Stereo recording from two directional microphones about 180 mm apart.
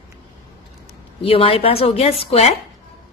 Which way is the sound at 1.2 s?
30° left (ahead or behind).